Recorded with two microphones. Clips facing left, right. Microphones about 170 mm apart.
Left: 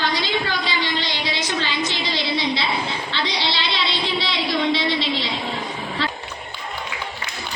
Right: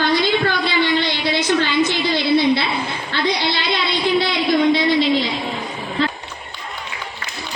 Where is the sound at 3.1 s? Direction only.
50° right (ahead or behind).